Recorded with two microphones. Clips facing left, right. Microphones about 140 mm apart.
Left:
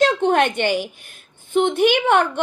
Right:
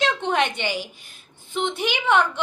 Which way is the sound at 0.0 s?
50° left (ahead or behind).